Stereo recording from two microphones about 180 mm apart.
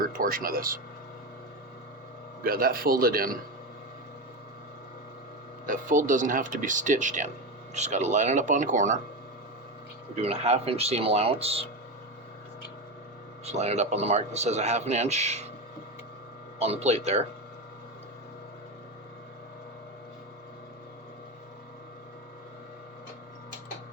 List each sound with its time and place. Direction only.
0.2 s speech: 50° right (ahead or behind)
2.4 s a man's voice: 55° right (ahead or behind)
5.6 s speech: 50° right (ahead or behind)
10.2 s speech: 35° right (ahead or behind)
13.4 s speech: 35° right (ahead or behind)
16.6 s speech: 35° right (ahead or behind)